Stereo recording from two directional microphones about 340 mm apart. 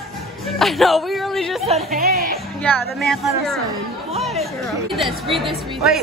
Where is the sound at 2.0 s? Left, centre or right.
Right.